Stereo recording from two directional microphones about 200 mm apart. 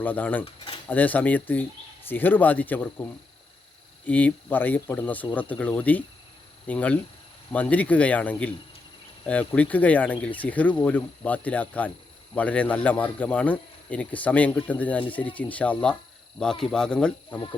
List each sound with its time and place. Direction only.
0.0 s speech: 10° left (ahead or behind)
0.4 s speech: 25° left (ahead or behind)
0.9 s speech: 10° left (ahead or behind)